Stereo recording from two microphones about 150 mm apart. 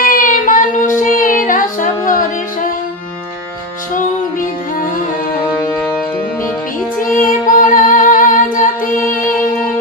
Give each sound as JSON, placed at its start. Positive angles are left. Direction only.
{"t": 0.2, "sound": "child singing", "side_deg": 60}
{"t": 7.0, "sound": "female singing", "side_deg": 65}